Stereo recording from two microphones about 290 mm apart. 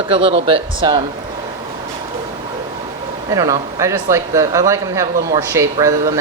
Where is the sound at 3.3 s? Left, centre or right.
Centre.